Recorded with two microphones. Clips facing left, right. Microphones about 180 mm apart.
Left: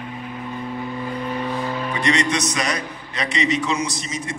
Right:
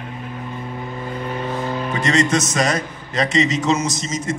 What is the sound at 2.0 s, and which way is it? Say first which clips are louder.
A man's voice: right 3 dB; 45° right (ahead or behind).